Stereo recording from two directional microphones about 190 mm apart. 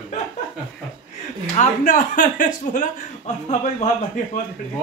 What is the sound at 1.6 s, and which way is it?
A man's voice, 40° left (ahead or behind).